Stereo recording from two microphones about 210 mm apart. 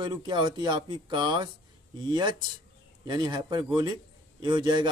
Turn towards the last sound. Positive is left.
turn(degrees=-20)  # may be behind; listen again after turning